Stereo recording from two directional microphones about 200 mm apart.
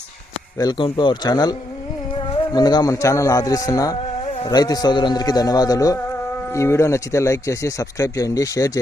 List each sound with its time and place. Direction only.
0.6 s speech: 20° left (ahead or behind)